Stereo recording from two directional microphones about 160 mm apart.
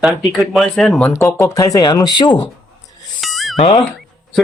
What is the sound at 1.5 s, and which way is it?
Speech, 20° left (ahead or behind).